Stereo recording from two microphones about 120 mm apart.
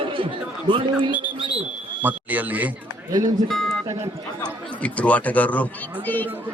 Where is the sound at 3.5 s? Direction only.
Centre (ahead or behind).